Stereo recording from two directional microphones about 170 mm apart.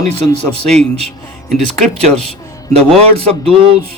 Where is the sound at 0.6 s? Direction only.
40° right (ahead or behind).